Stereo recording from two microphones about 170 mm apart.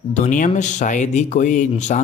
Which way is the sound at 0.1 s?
45° left (ahead or behind).